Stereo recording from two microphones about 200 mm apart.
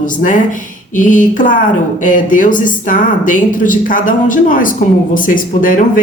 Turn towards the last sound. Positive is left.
turn(degrees=40)  # may be behind; listen again after turning